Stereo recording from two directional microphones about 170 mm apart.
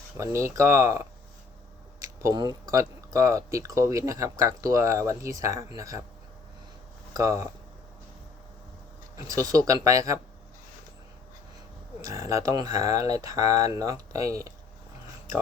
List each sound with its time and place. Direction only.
0.2 s speech: 15° right (ahead or behind)
7.1 s speech: 20° right (ahead or behind)
9.1 s speech: 20° right (ahead or behind)
12.0 s speech: 20° right (ahead or behind)